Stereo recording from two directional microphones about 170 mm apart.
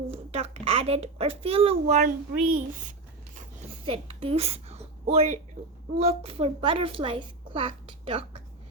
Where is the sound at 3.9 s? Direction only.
35° right (ahead or behind).